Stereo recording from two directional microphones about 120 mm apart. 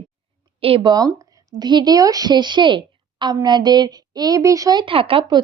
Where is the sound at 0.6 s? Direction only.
50° right (ahead or behind).